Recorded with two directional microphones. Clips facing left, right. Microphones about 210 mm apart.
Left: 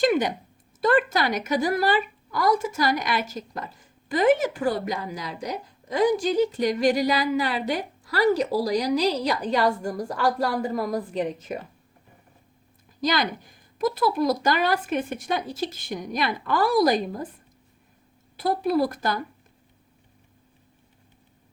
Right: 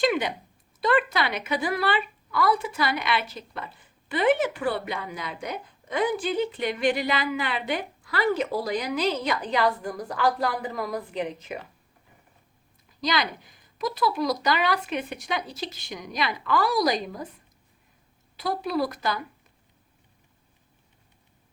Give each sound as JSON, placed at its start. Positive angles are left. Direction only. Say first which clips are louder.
{"t": 0.0, "sound": "a woman's voice", "louder": "left 3 dB", "side_deg": 45}
{"t": 13.0, "sound": "speech", "louder": "left 3 dB", "side_deg": 50}
{"t": 18.3, "sound": "speech", "louder": "left 4 dB", "side_deg": 50}